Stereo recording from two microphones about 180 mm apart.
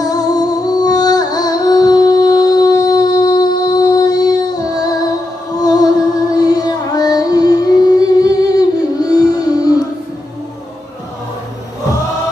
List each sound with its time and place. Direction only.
0.0 s music: 20° left (ahead or behind)